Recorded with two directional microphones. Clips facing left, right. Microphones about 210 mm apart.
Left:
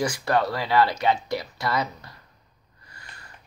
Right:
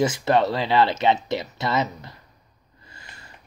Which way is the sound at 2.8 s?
25° right (ahead or behind).